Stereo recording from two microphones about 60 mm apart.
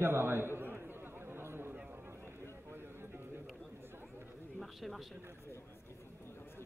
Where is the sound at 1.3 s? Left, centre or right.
Right.